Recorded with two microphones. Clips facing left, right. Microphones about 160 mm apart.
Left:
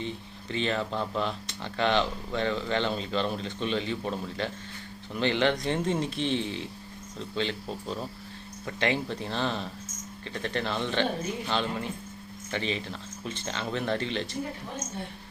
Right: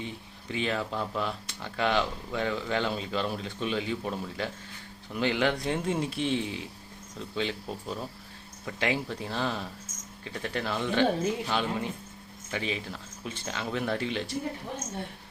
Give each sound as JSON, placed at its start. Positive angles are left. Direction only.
{"t": 0.0, "sound": "speech", "side_deg": -10}